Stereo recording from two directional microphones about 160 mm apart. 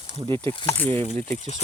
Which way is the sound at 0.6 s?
15° left (ahead or behind).